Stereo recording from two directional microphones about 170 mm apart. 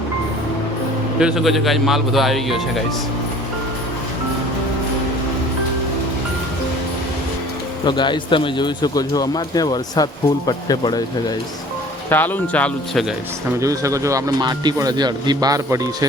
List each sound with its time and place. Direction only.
1.2 s speech: centre (ahead or behind)
7.9 s speech: 25° left (ahead or behind)
12.0 s speech: 10° left (ahead or behind)
13.6 s speech: 20° right (ahead or behind)